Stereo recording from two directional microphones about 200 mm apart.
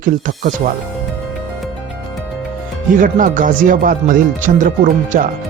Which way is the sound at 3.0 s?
40° right (ahead or behind).